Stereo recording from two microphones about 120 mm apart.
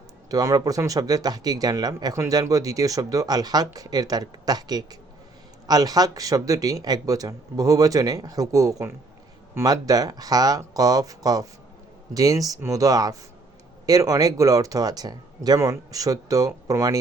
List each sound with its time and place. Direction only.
0.3 s speech: 30° right (ahead or behind)